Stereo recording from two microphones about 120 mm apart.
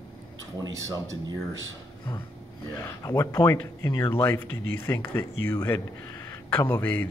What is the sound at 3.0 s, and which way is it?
A man's voice, 30° left (ahead or behind).